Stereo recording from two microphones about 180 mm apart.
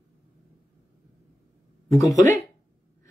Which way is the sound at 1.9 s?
20° left (ahead or behind).